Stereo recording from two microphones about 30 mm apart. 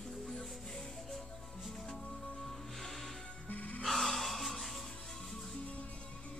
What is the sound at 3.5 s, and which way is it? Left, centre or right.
Music, left.